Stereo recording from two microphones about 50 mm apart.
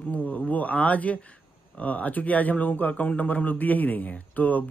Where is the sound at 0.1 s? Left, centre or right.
Left.